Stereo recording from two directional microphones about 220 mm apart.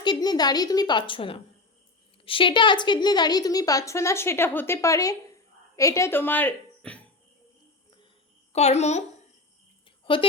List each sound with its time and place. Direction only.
0.0 s a woman's voice: 20° left (ahead or behind)
8.5 s a woman's voice: 30° left (ahead or behind)